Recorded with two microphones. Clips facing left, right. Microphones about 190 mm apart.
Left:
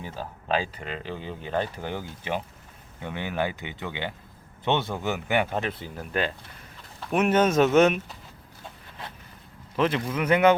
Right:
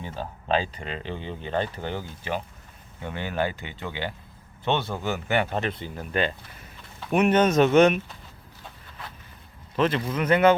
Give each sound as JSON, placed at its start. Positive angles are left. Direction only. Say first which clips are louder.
{"t": 0.0, "sound": "speech", "louder": "right 2 dB", "side_deg": 10}
{"t": 3.1, "sound": "speech", "louder": "right 1 dB", "side_deg": 15}
{"t": 9.7, "sound": "speech", "louder": "right 1 dB", "side_deg": 10}